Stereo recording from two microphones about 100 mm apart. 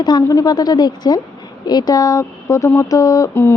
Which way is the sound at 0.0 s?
40° left (ahead or behind).